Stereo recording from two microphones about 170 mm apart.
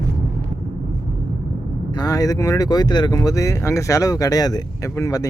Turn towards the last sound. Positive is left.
turn(degrees=20)  # may be behind; listen again after turning